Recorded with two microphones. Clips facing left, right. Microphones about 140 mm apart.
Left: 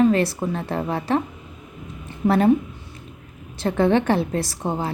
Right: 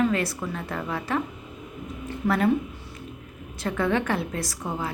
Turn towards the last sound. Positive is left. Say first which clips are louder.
# left 5 dB
turn(degrees=30)  # may be behind; listen again after turning